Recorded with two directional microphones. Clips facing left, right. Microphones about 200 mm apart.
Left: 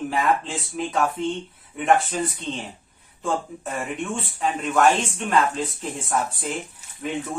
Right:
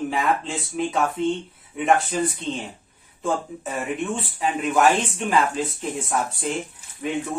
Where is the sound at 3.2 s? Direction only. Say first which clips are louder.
Right 1 dB; centre (ahead or behind).